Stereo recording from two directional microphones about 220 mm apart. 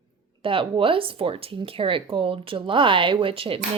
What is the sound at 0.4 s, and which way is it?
Speech, 25° right (ahead or behind).